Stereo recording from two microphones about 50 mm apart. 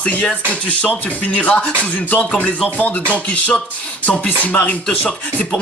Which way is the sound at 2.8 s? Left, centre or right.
Left.